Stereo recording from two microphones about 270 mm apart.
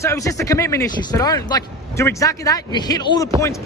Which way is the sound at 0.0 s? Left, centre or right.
Centre.